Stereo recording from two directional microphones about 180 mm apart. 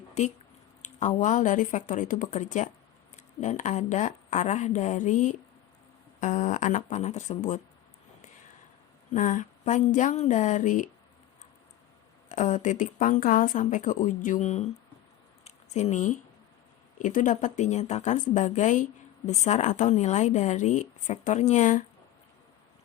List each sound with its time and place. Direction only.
0.2 s a woman's voice: 40° left (ahead or behind)
9.1 s a woman's voice: 45° left (ahead or behind)
12.3 s a woman's voice: 45° left (ahead or behind)
15.4 s a sound: 40° left (ahead or behind)
17.0 s a woman's voice: 45° left (ahead or behind)